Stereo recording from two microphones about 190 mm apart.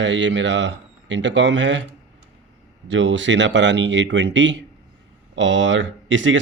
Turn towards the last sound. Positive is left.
turn(degrees=-75)  # may be behind; listen again after turning